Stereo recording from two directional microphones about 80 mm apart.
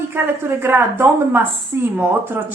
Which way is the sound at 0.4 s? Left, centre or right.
Right.